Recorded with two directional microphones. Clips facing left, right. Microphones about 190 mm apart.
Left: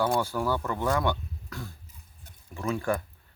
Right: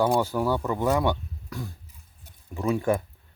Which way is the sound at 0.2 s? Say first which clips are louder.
Right 3 dB; 15° right (ahead or behind).